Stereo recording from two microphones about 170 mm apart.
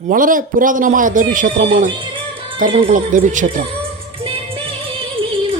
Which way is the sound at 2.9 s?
50° right (ahead or behind).